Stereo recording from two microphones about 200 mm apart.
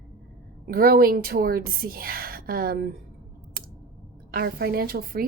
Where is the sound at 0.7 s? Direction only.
45° right (ahead or behind).